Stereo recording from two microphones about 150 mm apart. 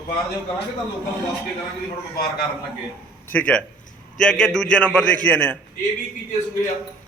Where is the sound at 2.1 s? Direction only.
85° left.